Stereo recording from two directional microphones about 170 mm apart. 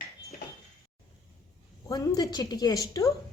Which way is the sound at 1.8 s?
20° left (ahead or behind).